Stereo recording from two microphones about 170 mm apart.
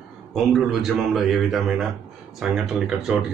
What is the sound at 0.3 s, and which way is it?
A man's voice, centre (ahead or behind).